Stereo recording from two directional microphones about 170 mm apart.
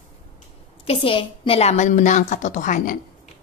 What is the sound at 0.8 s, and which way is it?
Speech, 30° left (ahead or behind).